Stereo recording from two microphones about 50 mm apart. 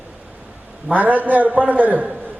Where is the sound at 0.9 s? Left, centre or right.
Right.